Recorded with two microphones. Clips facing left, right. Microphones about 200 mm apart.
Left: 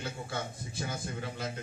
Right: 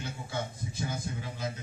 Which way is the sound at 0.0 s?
55° left (ahead or behind).